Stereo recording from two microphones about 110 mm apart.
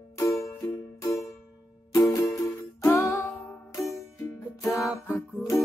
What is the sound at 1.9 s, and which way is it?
Music, 30° left (ahead or behind).